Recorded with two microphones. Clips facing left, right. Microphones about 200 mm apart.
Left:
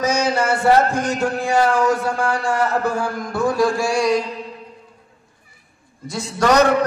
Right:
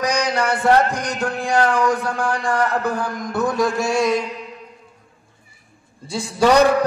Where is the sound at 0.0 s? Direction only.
15° right (ahead or behind).